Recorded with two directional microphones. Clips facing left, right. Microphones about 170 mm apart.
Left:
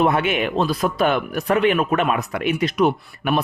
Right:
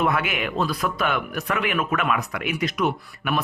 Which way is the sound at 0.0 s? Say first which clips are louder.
Left 5 dB; 30° left (ahead or behind).